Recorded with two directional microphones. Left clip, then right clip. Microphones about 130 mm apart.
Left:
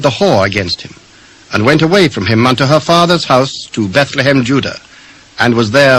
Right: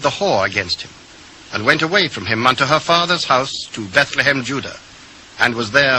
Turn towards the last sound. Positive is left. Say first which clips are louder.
# left 7 dB
turn(degrees=25)  # may be behind; listen again after turning